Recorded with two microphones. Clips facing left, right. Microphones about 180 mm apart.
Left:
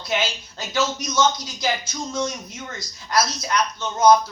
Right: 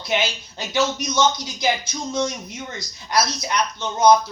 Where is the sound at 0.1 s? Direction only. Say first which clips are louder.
Right 2 dB; 20° right (ahead or behind).